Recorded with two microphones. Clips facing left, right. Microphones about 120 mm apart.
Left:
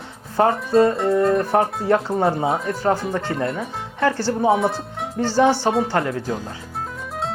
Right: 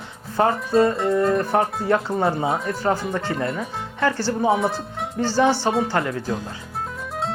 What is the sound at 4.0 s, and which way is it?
Speech, 30° left (ahead or behind).